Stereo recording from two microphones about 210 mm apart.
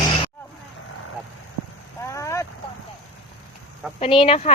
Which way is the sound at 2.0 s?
15° left (ahead or behind).